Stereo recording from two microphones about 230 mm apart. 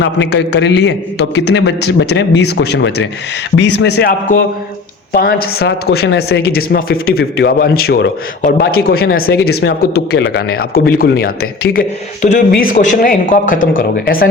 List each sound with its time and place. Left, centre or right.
0.0 s a man's voice: left